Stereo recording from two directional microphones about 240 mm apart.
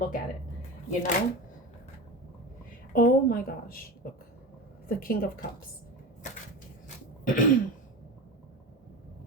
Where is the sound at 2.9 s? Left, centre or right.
Left.